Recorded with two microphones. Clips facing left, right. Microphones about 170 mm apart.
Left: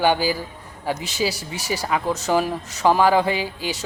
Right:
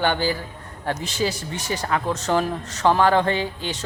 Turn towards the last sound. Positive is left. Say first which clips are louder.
# even
turn(degrees=10)  # may be behind; listen again after turning